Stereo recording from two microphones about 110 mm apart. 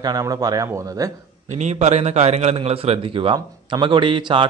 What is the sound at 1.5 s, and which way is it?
A man's voice, 90° right.